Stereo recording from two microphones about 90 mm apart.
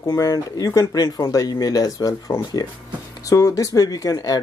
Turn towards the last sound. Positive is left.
turn(degrees=40)  # may be behind; listen again after turning